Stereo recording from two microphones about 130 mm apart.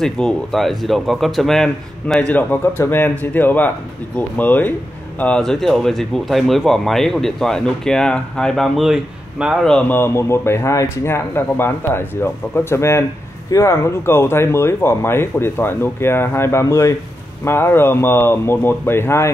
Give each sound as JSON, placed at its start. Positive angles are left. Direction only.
{"t": 0.0, "sound": "speech", "side_deg": 5}
{"t": 9.9, "sound": "speech", "side_deg": 20}